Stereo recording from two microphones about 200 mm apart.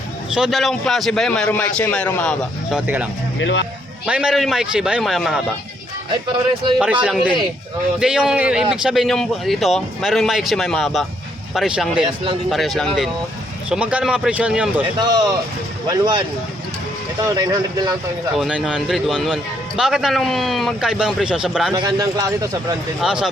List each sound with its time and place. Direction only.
0.3 s a man's voice: centre (ahead or behind)
3.4 s speech: 65° left (ahead or behind)
4.0 s a man's voice: 5° right (ahead or behind)
6.7 s a man's voice: 5° right (ahead or behind)
14.9 s speech: 20° right (ahead or behind)
17.2 s speech: 20° right (ahead or behind)
18.3 s a man's voice: 5° right (ahead or behind)
21.8 s speech: 20° right (ahead or behind)